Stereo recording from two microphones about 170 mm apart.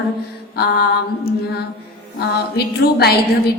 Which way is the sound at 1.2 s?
70° left (ahead or behind).